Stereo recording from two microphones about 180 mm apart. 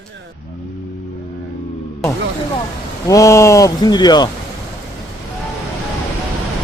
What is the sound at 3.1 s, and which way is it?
Speech, 15° left (ahead or behind).